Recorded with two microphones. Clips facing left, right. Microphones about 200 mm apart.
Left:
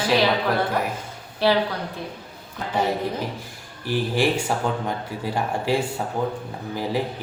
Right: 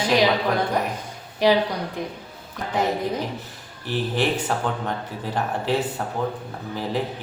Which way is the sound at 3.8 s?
10° left (ahead or behind).